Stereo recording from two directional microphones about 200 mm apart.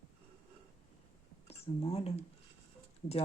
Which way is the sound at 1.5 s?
30° left (ahead or behind).